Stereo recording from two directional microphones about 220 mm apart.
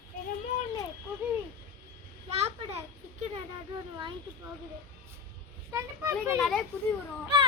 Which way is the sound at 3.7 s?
20° right (ahead or behind).